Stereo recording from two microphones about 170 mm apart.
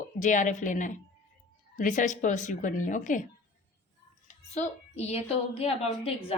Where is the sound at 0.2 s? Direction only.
50° left (ahead or behind).